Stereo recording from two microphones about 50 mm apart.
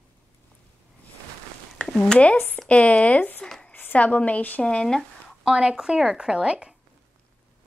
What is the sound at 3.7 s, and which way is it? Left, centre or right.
Speech, left.